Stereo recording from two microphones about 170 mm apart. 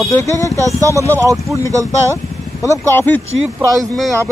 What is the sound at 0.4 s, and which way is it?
Speech, 20° left (ahead or behind).